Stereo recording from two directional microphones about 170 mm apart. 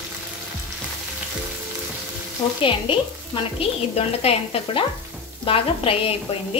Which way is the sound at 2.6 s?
30° left (ahead or behind).